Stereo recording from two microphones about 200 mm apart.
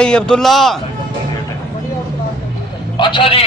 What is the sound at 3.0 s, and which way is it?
Speech, 25° left (ahead or behind).